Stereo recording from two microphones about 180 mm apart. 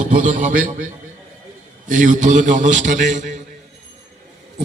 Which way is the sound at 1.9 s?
45° right (ahead or behind).